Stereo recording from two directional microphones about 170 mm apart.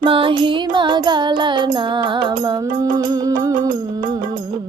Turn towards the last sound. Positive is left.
turn(degrees=-25)  # may be behind; listen again after turning